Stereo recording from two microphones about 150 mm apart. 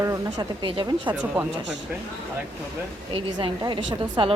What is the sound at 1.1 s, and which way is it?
Speech, 10° right (ahead or behind).